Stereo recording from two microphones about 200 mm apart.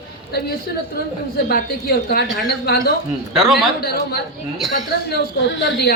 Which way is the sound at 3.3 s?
Centre (ahead or behind).